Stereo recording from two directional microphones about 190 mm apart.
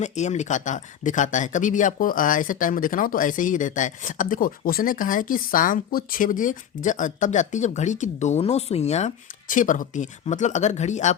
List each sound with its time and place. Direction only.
0.0 s speech: 40° left (ahead or behind)